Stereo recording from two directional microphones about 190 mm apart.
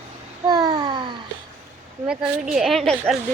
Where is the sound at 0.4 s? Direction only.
20° right (ahead or behind).